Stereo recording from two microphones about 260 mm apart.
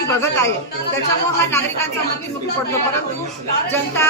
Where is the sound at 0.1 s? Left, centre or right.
Centre.